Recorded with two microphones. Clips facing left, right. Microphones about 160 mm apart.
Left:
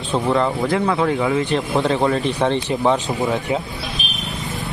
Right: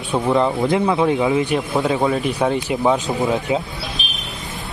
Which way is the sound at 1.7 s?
5° right (ahead or behind).